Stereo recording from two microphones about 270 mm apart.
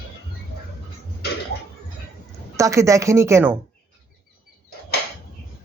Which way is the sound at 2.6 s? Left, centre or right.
Centre.